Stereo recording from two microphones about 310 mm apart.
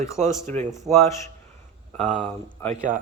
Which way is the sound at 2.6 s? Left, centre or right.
Centre.